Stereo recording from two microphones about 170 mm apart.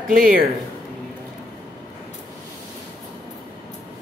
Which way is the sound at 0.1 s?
55° right (ahead or behind).